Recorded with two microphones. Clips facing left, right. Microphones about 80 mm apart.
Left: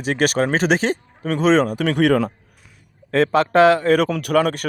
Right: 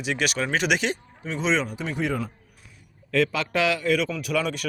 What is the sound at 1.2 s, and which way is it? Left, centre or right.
Speech, left.